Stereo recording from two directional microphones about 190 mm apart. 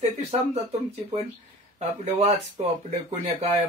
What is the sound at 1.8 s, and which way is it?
Speech, 35° right (ahead or behind).